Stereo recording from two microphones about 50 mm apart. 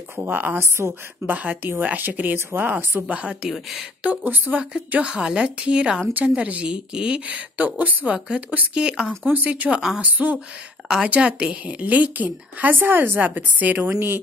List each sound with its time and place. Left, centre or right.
0.1 s a woman's voice: right
0.6 s a woman's voice: right
1.2 s a woman's voice: right
3.1 s a woman's voice: right
3.4 s speech: centre
4.0 s a woman's voice: right
4.9 s a woman's voice: right
9.2 s a woman's voice: right
9.8 s speech: centre
10.0 s a woman's voice: right
13.7 s speech: right